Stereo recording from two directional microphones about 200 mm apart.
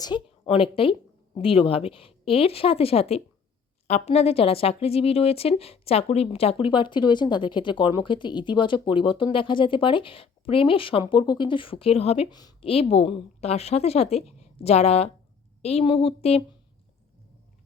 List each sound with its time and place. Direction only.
0.0 s a woman's voice: 25° left (ahead or behind)